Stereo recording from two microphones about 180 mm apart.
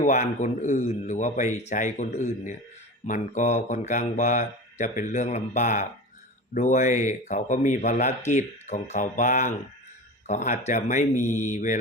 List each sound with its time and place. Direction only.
0.0 s speech: 40° left (ahead or behind)